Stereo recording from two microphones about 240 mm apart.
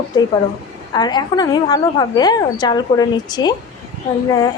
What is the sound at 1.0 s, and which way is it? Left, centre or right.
A woman's voice, centre.